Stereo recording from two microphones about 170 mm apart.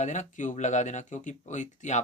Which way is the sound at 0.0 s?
45° left (ahead or behind).